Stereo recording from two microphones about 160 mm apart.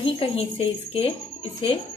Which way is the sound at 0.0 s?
40° left (ahead or behind).